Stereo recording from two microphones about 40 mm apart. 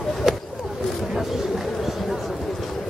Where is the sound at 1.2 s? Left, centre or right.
Centre.